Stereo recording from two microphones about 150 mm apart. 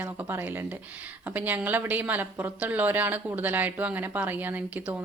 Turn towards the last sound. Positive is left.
turn(degrees=-10)  # may be behind; listen again after turning